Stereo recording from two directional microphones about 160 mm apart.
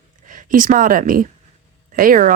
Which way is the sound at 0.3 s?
55° right (ahead or behind).